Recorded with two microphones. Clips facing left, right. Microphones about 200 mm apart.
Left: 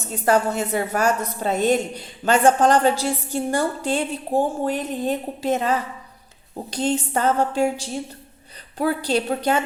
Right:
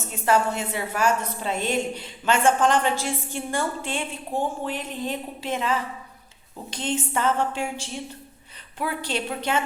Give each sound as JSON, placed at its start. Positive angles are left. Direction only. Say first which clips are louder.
{"t": 0.1, "sound": "a woman's voice", "louder": "left 3 dB", "side_deg": 40}